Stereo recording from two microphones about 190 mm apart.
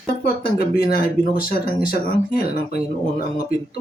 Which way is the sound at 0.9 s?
50° left (ahead or behind).